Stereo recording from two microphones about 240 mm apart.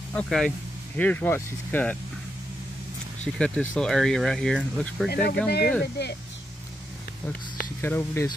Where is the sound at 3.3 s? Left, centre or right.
Centre.